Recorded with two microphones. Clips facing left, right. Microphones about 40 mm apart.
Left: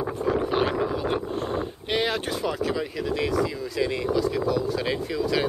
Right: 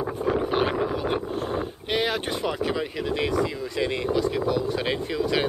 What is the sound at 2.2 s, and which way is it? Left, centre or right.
Speech, right.